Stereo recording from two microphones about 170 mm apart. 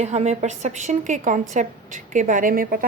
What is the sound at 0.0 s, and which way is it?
A woman's voice, 40° right (ahead or behind).